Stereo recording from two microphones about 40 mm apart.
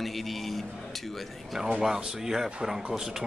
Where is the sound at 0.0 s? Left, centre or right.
Centre.